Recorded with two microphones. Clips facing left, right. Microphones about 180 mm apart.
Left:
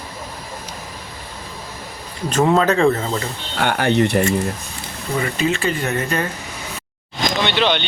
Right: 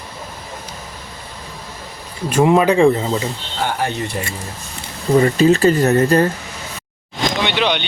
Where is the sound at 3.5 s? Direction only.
70° left (ahead or behind).